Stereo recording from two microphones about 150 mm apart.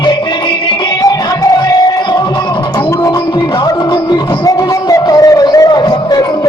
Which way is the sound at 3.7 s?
25° left (ahead or behind).